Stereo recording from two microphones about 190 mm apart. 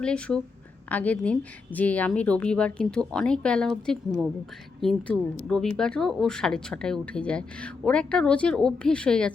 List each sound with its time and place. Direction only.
0.0 s speech: 5° left (ahead or behind)